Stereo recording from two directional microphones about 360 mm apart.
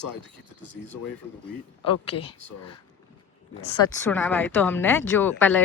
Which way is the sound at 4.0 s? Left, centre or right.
Centre.